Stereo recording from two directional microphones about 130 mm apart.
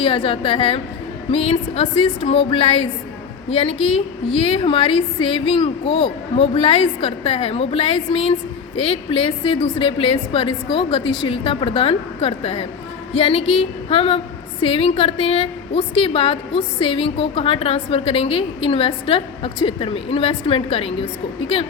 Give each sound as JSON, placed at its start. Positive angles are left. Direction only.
{"t": 0.0, "sound": "a woman's voice", "side_deg": 45}